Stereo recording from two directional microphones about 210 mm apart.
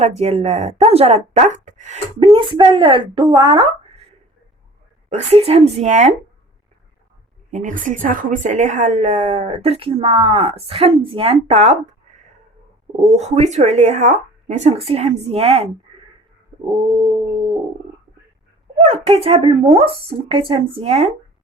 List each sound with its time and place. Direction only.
0.0 s speech: 30° right (ahead or behind)
5.0 s a woman's voice: 30° right (ahead or behind)
7.5 s a woman's voice: 40° right (ahead or behind)
16.6 s speech: 25° right (ahead or behind)
18.8 s speech: 30° right (ahead or behind)